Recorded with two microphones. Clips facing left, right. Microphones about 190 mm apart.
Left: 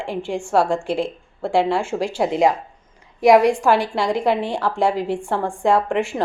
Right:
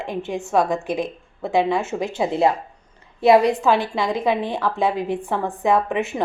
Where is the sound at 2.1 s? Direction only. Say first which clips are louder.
Left 1 dB; 10° left (ahead or behind).